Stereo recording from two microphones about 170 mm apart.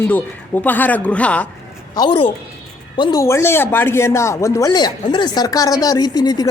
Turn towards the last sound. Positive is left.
turn(degrees=25)  # may be behind; listen again after turning